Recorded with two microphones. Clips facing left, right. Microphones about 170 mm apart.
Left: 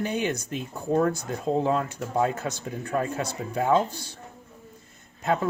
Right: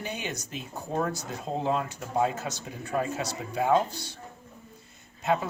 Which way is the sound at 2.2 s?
55° left (ahead or behind).